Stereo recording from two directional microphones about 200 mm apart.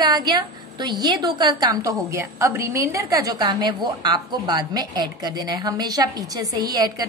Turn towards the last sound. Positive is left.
turn(degrees=-20)  # may be behind; listen again after turning